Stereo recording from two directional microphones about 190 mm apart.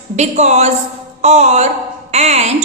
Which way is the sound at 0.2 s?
35° right (ahead or behind).